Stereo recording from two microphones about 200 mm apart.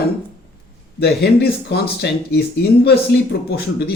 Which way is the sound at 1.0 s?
55° left (ahead or behind).